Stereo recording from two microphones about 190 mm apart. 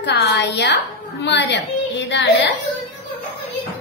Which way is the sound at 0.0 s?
65° left (ahead or behind).